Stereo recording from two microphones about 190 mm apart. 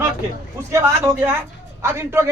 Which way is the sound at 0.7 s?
15° right (ahead or behind).